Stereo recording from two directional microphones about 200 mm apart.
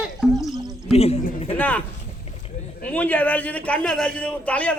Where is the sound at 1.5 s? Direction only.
10° left (ahead or behind).